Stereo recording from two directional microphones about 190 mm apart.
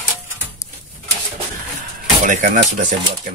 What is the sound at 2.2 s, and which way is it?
Speech, 40° right (ahead or behind).